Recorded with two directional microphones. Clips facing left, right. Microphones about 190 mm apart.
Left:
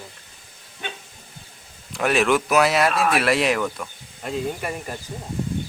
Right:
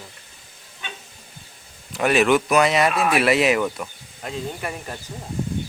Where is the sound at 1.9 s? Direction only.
Centre (ahead or behind).